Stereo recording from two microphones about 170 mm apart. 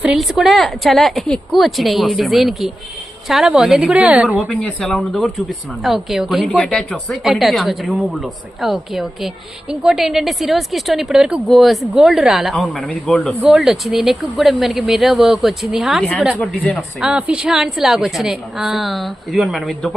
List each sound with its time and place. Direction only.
0.0 s speech: 5° right (ahead or behind)
4.4 s speech: 5° left (ahead or behind)